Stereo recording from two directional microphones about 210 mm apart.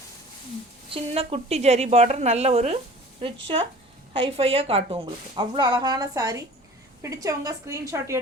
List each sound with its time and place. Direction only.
0.9 s a woman's voice: 25° right (ahead or behind)